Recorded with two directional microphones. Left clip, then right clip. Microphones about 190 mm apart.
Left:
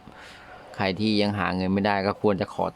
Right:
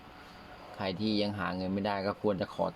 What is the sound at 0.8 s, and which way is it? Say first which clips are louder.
Speech: left 8 dB; 55° left (ahead or behind).